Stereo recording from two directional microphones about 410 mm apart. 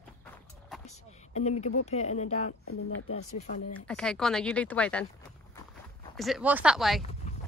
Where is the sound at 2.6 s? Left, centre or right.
Left.